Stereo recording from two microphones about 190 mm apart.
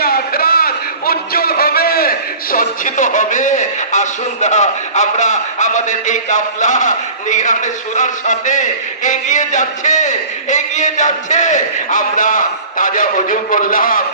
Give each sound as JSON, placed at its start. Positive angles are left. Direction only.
{"t": 0.0, "sound": "a man's voice", "side_deg": 55}